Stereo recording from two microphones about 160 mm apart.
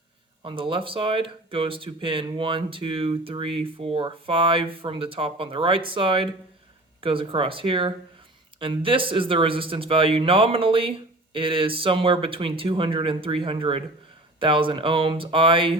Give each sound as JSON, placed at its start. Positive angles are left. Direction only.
{"t": 0.4, "sound": "speech", "side_deg": -30}